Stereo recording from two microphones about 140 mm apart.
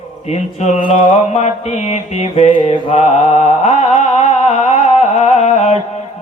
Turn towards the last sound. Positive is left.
turn(degrees=50)  # may be behind; listen again after turning